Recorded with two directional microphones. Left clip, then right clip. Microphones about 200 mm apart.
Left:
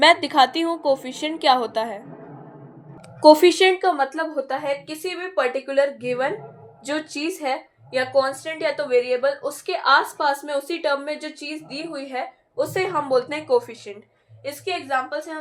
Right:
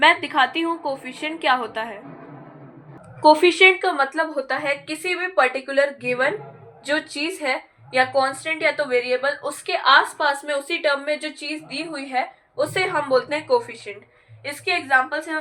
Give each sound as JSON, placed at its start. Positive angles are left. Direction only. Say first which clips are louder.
{"t": 0.0, "sound": "a woman's voice", "louder": "left 1 dB", "side_deg": 50}
{"t": 3.2, "sound": "a woman's voice", "louder": "left 1 dB", "side_deg": 60}
{"t": 14.4, "sound": "a woman's voice", "louder": "right 4 dB", "side_deg": 40}